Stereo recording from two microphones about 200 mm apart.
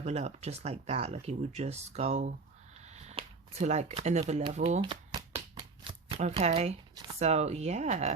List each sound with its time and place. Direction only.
0.0 s speech: 35° right (ahead or behind)
2.8 s shuffling cards: 35° right (ahead or behind)
7.2 s speech: 35° right (ahead or behind)